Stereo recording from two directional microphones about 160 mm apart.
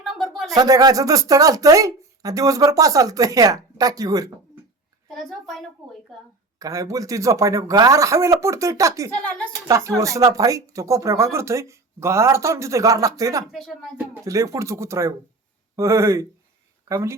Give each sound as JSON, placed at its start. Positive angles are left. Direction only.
{"t": 0.0, "sound": "a sound", "side_deg": 0}
{"t": 0.5, "sound": "speech", "side_deg": -25}
{"t": 5.0, "sound": "a child's voice", "side_deg": 0}
{"t": 6.6, "sound": "speech", "side_deg": -20}
{"t": 9.1, "sound": "a woman's voice", "side_deg": 10}
{"t": 9.6, "sound": "speech", "side_deg": -20}
{"t": 13.5, "sound": "a child's voice", "side_deg": 0}
{"t": 14.1, "sound": "a woman's voice", "side_deg": -20}